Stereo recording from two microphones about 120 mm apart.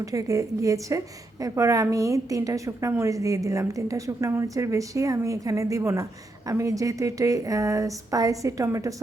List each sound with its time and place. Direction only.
0.0 s a woman's voice: 30° right (ahead or behind)